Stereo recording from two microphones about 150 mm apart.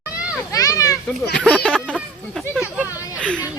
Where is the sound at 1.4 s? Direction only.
5° left (ahead or behind).